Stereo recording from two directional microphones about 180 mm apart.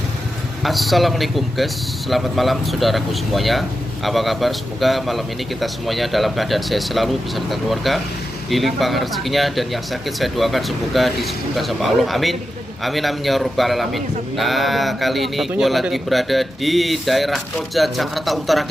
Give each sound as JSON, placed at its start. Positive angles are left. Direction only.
{"t": 0.6, "sound": "a man's voice", "side_deg": 0}